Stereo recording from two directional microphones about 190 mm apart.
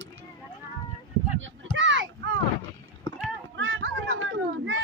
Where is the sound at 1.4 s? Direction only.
75° right (ahead or behind).